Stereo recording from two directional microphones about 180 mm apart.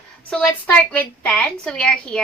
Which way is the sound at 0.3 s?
5° left (ahead or behind).